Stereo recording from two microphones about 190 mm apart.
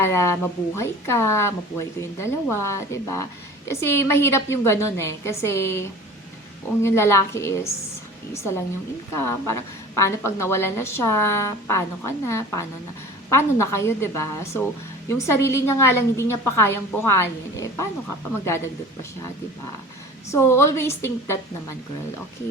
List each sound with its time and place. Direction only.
0.0 s a woman's voice: 15° left (ahead or behind)
20.3 s a woman's voice: 15° left (ahead or behind)